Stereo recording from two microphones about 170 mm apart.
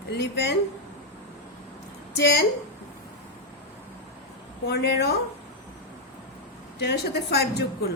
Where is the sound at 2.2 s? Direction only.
80° left.